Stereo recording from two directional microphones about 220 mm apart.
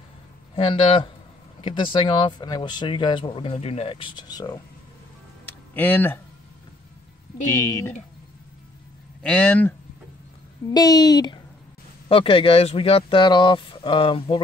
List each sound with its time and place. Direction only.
0.6 s speech: 25° left (ahead or behind)
5.4 s music: 10° left (ahead or behind)
7.4 s a woman's voice: 15° left (ahead or behind)
9.2 s a woman's voice: 5° left (ahead or behind)
10.7 s a woman's voice: 15° left (ahead or behind)